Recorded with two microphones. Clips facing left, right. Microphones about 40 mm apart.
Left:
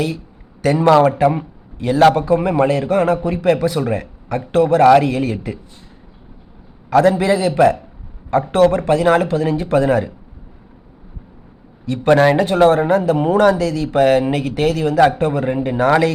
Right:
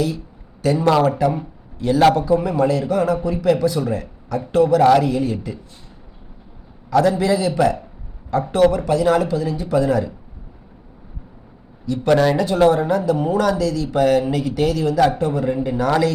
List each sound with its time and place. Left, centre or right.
0.6 s a man's voice: left
2.1 s a man's voice: left
6.9 s a man's voice: left
12.0 s a man's voice: left